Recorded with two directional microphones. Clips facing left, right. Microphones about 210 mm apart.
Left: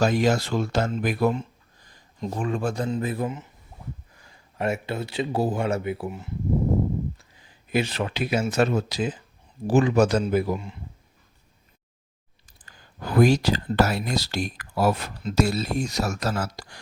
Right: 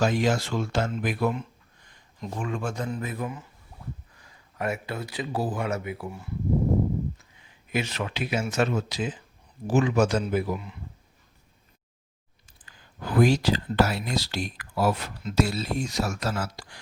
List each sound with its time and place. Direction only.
0.0 s speech: 40° left (ahead or behind); by 6.2 s 25° left (ahead or behind)
7.3 s speech: 35° left (ahead or behind)
12.6 s speech: 40° left (ahead or behind)